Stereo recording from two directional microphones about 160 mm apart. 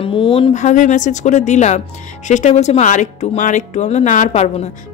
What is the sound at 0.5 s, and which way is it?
Speech, 50° left (ahead or behind).